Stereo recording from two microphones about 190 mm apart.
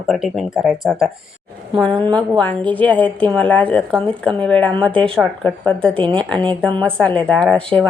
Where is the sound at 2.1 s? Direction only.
5° left (ahead or behind).